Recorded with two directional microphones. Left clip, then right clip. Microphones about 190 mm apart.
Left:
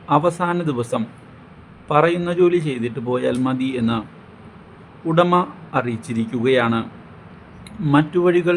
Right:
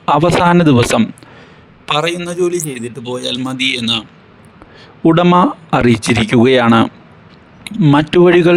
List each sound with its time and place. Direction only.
0.0 s speech: 55° right (ahead or behind)
2.0 s a man's voice: centre (ahead or behind)
5.0 s speech: 50° right (ahead or behind)
7.6 s speech: 40° right (ahead or behind)
7.9 s speech: 55° right (ahead or behind)